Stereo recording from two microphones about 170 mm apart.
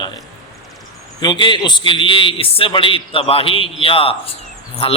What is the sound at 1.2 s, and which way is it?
A man's voice, 25° left (ahead or behind).